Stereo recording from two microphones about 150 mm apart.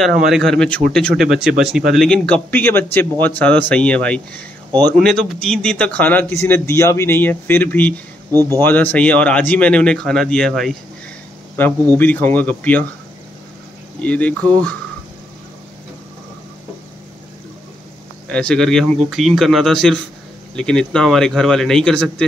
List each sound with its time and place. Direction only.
0.0 s a man's voice: centre (ahead or behind)
8.3 s speech: 25° right (ahead or behind)
8.6 s a man's voice: 10° left (ahead or behind)
12.0 s a man's voice: 10° left (ahead or behind)
14.0 s a man's voice: 10° left (ahead or behind)
18.3 s a man's voice: 5° left (ahead or behind)